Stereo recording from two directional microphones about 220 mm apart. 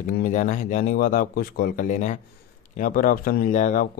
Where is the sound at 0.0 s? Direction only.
35° left (ahead or behind).